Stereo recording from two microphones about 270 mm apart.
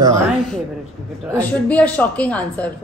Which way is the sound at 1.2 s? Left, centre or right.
Centre.